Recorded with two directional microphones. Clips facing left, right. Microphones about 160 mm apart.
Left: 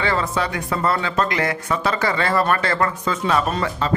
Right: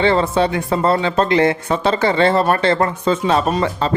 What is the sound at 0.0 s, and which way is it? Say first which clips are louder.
Speech: right 7 dB; 25° right (ahead or behind).